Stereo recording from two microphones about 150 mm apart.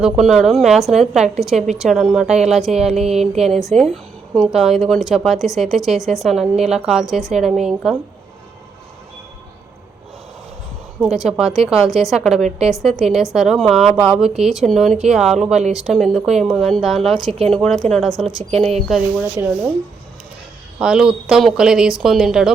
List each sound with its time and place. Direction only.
0.0 s a woman's voice: centre (ahead or behind)
11.0 s a woman's voice: 5° right (ahead or behind)
12.4 s a woman's voice: 50° right (ahead or behind)
12.8 s a woman's voice: centre (ahead or behind)
18.5 s a woman's voice: 45° right (ahead or behind)
19.2 s speech: 15° right (ahead or behind)
20.7 s a woman's voice: 5° right (ahead or behind)